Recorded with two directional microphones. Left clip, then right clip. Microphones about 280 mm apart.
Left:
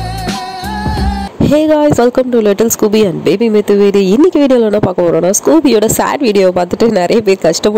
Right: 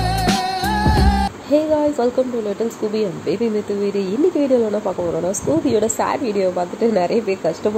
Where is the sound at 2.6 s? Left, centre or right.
Left.